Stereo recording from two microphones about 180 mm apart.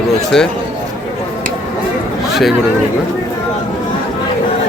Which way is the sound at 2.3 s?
Centre (ahead or behind).